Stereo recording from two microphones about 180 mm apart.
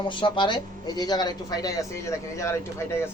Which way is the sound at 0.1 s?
25° left (ahead or behind).